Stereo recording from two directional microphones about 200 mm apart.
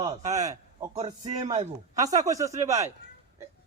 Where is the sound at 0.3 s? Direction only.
15° right (ahead or behind).